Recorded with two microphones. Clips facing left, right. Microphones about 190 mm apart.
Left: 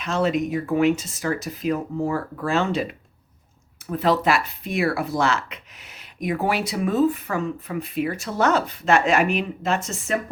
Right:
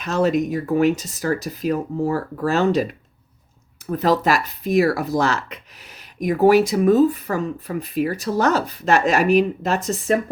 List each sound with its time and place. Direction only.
0.0 s speech: 40° right (ahead or behind)